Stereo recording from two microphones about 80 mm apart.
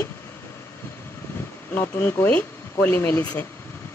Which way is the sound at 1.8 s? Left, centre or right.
Left.